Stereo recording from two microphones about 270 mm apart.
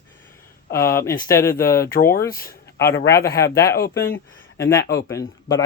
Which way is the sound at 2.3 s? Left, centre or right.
Left.